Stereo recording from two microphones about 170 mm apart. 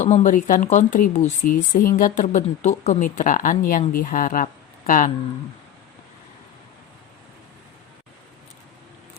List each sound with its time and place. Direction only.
0.0 s speech: 45° left (ahead or behind)